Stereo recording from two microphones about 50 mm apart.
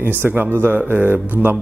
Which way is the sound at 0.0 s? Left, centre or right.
Right.